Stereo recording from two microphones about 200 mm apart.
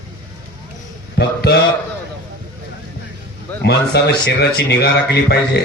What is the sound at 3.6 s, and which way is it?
Music, 55° left (ahead or behind).